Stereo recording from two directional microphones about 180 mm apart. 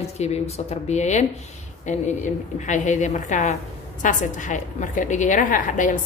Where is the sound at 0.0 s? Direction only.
35° left (ahead or behind).